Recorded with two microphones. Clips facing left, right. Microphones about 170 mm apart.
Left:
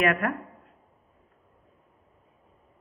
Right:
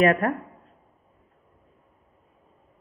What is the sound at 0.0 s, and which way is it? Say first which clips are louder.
Speech: right 5 dB; 35° right (ahead or behind).